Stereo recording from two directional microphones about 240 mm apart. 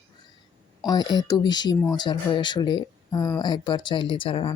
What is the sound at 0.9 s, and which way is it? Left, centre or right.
Speech, centre.